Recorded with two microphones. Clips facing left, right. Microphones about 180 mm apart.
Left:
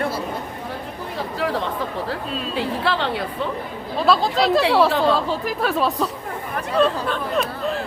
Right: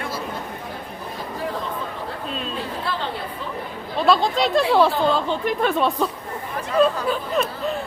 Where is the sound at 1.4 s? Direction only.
80° left.